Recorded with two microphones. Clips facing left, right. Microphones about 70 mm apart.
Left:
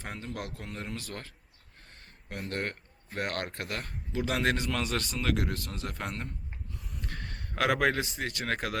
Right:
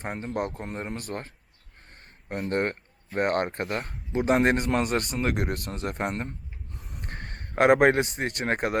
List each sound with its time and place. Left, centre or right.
0.0 s speech: right
2.3 s speech: right
6.7 s mechanisms: right
7.1 s a man's voice: right